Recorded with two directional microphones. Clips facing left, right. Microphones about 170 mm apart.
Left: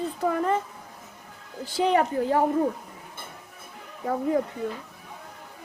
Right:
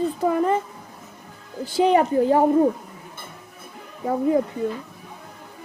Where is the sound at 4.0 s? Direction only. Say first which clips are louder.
Right 4 dB; 20° right (ahead or behind).